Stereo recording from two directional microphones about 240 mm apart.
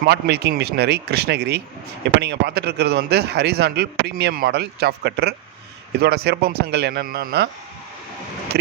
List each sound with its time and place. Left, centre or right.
0.0 s a man's voice: right